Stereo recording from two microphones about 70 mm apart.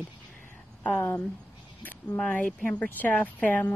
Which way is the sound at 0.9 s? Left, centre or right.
Left.